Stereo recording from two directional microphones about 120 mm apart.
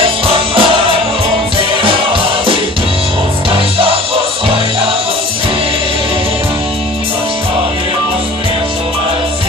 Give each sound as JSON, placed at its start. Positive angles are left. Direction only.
{"t": 0.0, "sound": "music", "side_deg": -50}
{"t": 3.5, "sound": "music", "side_deg": -50}